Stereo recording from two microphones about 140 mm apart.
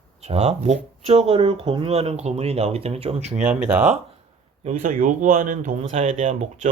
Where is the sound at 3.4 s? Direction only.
10° right (ahead or behind).